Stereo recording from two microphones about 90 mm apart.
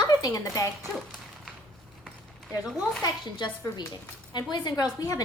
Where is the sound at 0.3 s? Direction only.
40° left (ahead or behind).